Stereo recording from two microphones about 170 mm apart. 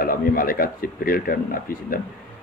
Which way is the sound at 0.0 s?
55° left (ahead or behind).